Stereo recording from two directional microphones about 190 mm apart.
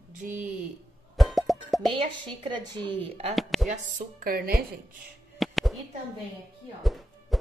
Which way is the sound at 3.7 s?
45° right (ahead or behind).